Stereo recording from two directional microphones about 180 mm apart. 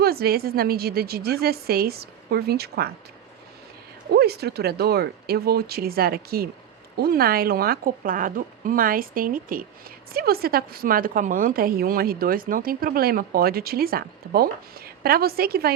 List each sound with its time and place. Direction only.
0.0 s speech: 60° right (ahead or behind)
4.1 s a woman's voice: 60° right (ahead or behind)